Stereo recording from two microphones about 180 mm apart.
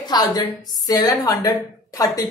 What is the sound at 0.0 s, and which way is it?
A woman's voice, 20° left (ahead or behind).